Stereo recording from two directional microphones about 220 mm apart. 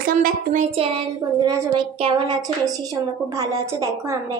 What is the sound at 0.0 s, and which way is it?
A woman's voice, 40° right (ahead or behind).